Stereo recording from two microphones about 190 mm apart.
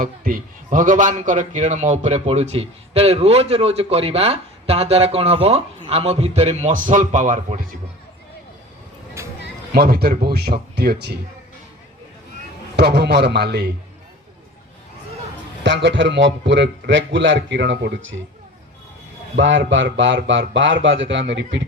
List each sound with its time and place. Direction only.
0.0 s a man's voice: 45° right (ahead or behind)
9.2 s music: 15° right (ahead or behind)
9.7 s speech: 55° right (ahead or behind)
12.7 s speech: 60° right (ahead or behind)
15.6 s a man's voice: 70° right (ahead or behind)
19.4 s a man's voice: 75° right (ahead or behind)